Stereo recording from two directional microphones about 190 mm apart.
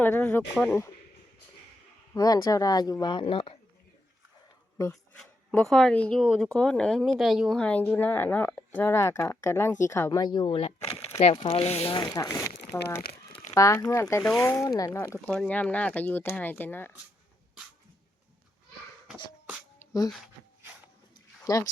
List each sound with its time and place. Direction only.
0.0 s speech: 10° left (ahead or behind)
2.1 s a woman's voice: 20° left (ahead or behind)
4.9 s a woman's voice: 5° left (ahead or behind); by 12.0 s 30° left (ahead or behind)
12.0 s speech: 20° left (ahead or behind)
13.5 s speech: 15° left (ahead or behind)
19.8 s a sound: 15° left (ahead or behind)
21.5 s a woman's voice: 20° left (ahead or behind)